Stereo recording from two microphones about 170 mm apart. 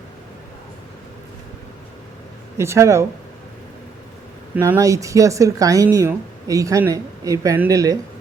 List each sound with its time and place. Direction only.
2.6 s speech: 15° right (ahead or behind)
4.5 s a woman's voice: 10° right (ahead or behind)